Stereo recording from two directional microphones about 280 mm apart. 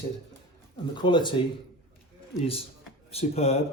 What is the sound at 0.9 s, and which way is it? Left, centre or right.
Speech, centre.